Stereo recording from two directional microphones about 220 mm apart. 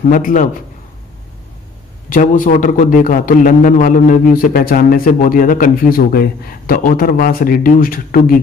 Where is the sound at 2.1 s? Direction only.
40° left (ahead or behind).